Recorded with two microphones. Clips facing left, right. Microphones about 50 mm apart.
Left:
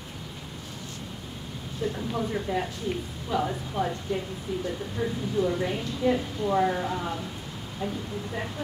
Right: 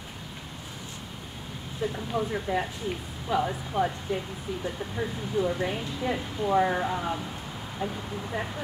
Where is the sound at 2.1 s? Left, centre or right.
Centre.